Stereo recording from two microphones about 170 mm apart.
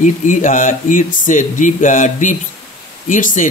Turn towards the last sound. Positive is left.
turn(degrees=50)  # may be behind; listen again after turning